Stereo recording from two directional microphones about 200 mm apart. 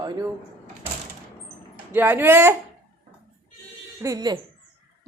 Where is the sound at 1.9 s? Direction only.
10° right (ahead or behind).